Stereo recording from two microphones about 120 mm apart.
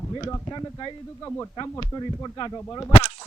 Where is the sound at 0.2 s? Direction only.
20° left (ahead or behind).